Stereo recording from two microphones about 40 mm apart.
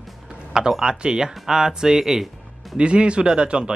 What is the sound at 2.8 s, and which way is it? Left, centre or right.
Speech, right.